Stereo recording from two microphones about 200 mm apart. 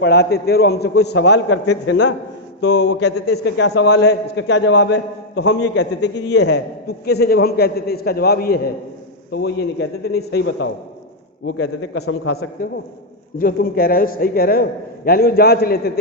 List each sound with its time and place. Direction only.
0.0 s a man's voice: 55° left (ahead or behind); by 12.5 s 90° left
13.4 s a man's voice: 45° left (ahead or behind)